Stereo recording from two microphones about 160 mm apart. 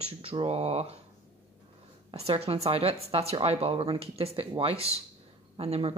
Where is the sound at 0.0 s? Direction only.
35° right (ahead or behind).